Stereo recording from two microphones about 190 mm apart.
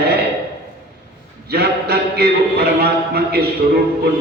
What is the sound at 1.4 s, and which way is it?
Speech, 55° right (ahead or behind).